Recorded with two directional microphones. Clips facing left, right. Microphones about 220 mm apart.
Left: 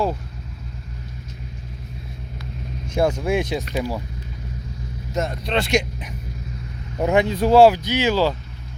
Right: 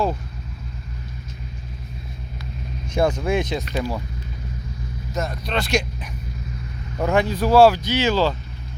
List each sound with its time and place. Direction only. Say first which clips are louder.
2.8 s speech: even; 10° left (ahead or behind)
5.1 s speech: left 3 dB; 25° left (ahead or behind)